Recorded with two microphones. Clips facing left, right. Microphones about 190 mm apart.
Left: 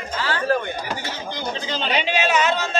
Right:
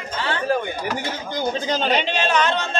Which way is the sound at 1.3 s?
45° right (ahead or behind).